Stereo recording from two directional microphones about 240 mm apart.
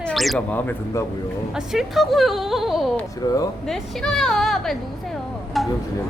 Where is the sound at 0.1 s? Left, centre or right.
Centre.